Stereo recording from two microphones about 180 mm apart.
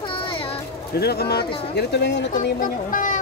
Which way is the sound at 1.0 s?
60° left (ahead or behind).